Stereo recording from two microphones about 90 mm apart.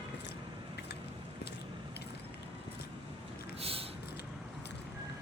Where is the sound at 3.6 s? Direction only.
90° right.